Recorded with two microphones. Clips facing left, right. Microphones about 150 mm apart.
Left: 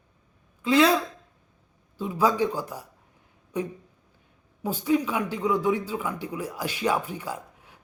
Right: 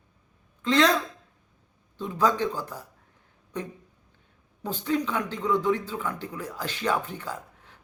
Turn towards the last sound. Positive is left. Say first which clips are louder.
# left 2 dB
turn(degrees=10)  # may be behind; listen again after turning